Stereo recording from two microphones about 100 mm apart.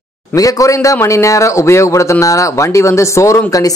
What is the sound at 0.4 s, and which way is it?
A man's voice, 35° left (ahead or behind).